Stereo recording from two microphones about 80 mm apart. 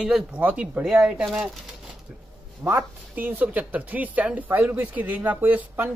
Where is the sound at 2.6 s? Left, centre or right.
Right.